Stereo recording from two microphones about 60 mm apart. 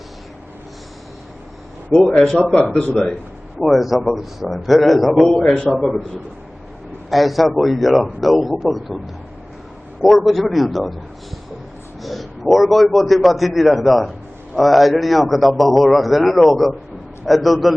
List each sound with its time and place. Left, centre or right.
2.0 s a man's voice: centre
3.6 s a man's voice: centre
10.0 s a man's voice: centre
12.0 s a man's voice: centre